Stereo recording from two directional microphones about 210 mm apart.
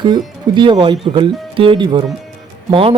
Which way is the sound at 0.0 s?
20° right (ahead or behind).